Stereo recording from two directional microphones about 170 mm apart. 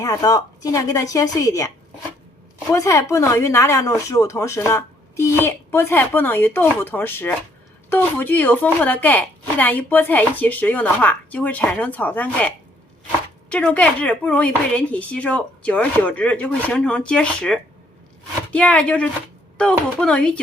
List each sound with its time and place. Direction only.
0.0 s a woman's voice: 20° left (ahead or behind)
2.7 s speech: 20° left (ahead or behind)
13.5 s speech: 5° left (ahead or behind)